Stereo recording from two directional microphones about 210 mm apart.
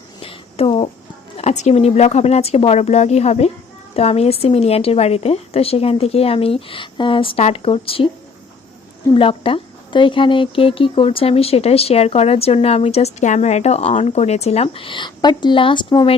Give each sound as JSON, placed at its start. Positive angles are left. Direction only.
{"t": 0.2, "sound": "a sound", "side_deg": 25}
{"t": 1.4, "sound": "a woman's voice", "side_deg": 35}
{"t": 9.1, "sound": "speech", "side_deg": 25}